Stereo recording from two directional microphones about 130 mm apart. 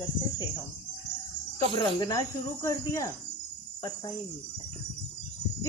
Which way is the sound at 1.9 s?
30° left (ahead or behind).